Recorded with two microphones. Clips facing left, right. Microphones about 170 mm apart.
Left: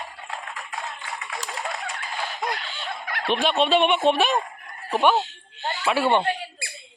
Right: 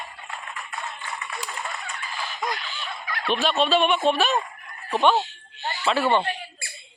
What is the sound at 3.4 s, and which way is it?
Speech, 15° left (ahead or behind).